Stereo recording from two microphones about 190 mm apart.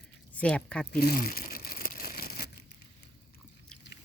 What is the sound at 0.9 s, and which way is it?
Crumpling, 50° left (ahead or behind).